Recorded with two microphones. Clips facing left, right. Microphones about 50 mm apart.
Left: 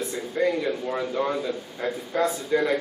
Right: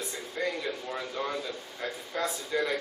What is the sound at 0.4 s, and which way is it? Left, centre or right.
A man's voice, centre.